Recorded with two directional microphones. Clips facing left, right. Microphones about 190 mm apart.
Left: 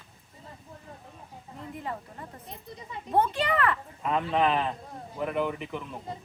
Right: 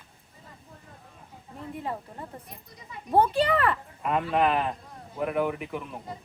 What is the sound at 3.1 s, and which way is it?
Speech, 30° right (ahead or behind).